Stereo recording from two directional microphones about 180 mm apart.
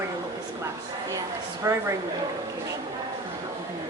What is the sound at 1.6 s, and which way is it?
Speech, 15° right (ahead or behind).